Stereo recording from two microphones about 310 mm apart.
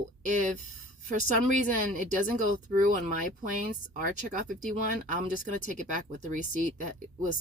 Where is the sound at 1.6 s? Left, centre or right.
Right.